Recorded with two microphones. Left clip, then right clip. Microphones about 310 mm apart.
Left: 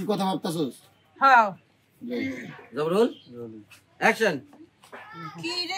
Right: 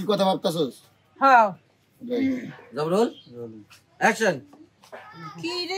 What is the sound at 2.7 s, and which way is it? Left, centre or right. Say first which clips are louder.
Speech: even; right.